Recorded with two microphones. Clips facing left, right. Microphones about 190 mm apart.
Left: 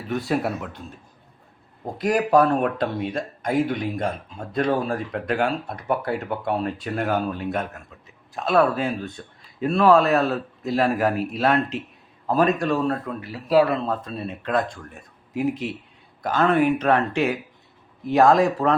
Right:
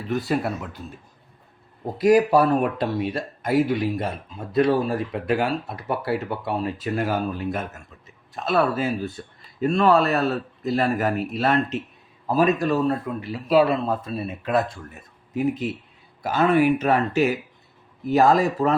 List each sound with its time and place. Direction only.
0.1 s speech: centre (ahead or behind)
2.0 s speech: 5° right (ahead or behind)
13.5 s speech: 25° right (ahead or behind)
13.8 s speech: 10° right (ahead or behind)